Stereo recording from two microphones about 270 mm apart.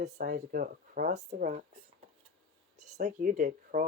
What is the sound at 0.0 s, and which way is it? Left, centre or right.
Speech, right.